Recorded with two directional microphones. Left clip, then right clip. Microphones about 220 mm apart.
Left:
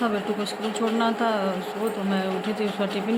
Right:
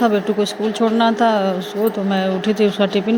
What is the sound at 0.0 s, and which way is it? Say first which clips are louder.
Speech: right 9 dB; 25° right (ahead or behind).